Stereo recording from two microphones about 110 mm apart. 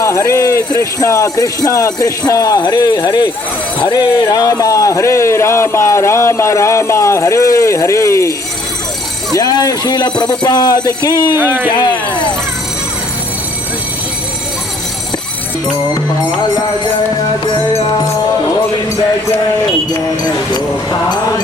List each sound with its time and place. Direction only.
0.0 s speech: 30° left (ahead or behind)
9.3 s speech: 35° left (ahead or behind)
11.3 s speech: 20° right (ahead or behind)
11.7 s speech: 40° left (ahead or behind)
19.9 s a sound: 40° left (ahead or behind)